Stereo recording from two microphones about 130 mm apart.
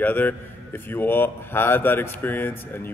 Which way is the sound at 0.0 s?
15° left (ahead or behind).